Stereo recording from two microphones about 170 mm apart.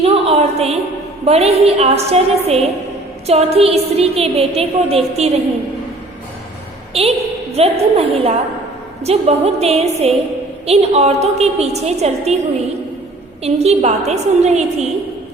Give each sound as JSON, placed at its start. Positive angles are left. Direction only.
{"t": 0.0, "sound": "a sound", "side_deg": -35}
{"t": 1.2, "sound": "a woman's voice", "side_deg": -40}
{"t": 6.9, "sound": "a woman's voice", "side_deg": -35}
{"t": 13.4, "sound": "a woman's voice", "side_deg": -40}